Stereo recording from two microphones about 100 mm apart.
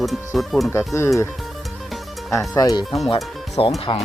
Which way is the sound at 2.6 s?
40° left (ahead or behind).